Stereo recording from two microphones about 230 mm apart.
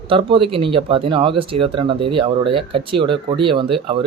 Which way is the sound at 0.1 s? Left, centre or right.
Right.